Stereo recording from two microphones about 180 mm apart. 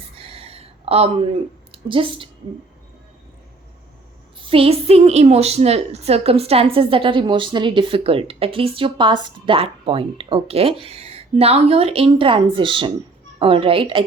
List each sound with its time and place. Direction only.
0.2 s a sound: 30° right (ahead or behind)
1.7 s a woman's voice: 30° right (ahead or behind)
4.4 s a woman's voice: 30° right (ahead or behind)